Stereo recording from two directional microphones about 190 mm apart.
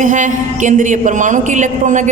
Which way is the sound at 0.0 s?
40° right (ahead or behind).